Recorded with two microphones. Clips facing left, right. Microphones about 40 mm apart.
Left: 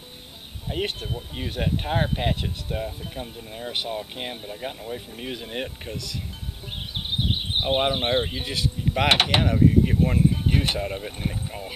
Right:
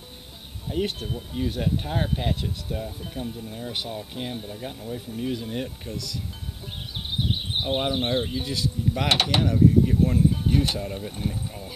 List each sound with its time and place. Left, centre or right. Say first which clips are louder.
0.7 s speech: right 1 dB; left
0.9 s speech: even; centre
1.3 s speech: right 2 dB; left
6.9 s music: left 1 dB; left
9.1 s speech: left 2 dB; left
9.4 s speech: even; left